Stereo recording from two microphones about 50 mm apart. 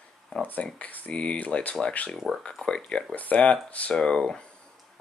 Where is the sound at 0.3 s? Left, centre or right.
Left.